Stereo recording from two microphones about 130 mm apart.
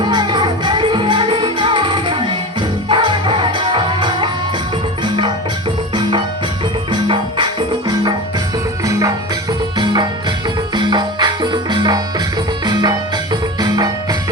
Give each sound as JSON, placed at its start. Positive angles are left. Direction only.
{"t": 0.1, "sound": "music", "side_deg": -35}
{"t": 8.8, "sound": "music", "side_deg": -25}